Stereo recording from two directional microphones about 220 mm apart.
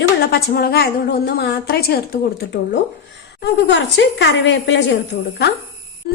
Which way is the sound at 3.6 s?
55° left (ahead or behind).